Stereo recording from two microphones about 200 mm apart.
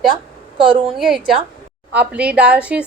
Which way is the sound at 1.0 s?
Centre (ahead or behind).